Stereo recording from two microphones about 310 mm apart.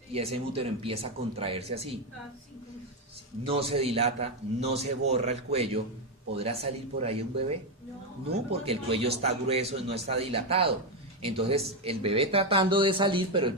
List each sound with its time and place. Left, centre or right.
0.1 s a man's voice: centre
3.4 s a man's voice: centre